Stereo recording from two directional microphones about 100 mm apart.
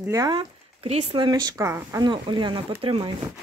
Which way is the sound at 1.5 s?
30° right (ahead or behind).